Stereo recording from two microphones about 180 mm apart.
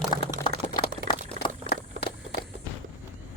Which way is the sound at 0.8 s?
25° left (ahead or behind).